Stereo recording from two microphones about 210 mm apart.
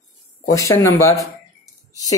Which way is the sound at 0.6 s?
15° left (ahead or behind).